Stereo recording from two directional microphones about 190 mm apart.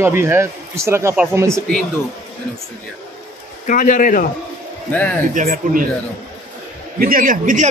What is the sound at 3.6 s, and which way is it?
Speech, 45° left (ahead or behind).